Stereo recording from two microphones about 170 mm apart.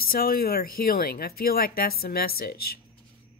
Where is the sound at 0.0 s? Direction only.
60° left (ahead or behind).